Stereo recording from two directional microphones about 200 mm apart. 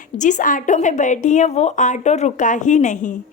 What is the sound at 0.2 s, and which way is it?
A woman's voice, 40° left (ahead or behind).